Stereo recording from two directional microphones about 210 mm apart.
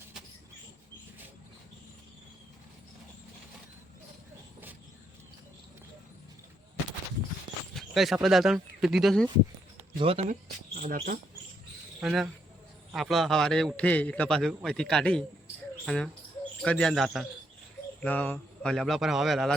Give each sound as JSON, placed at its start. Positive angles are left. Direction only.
{"t": 7.7, "sound": "speech", "side_deg": 0}
{"t": 10.0, "sound": "speech", "side_deg": -30}
{"t": 10.8, "sound": "speech", "side_deg": -45}
{"t": 11.9, "sound": "a man's voice", "side_deg": -5}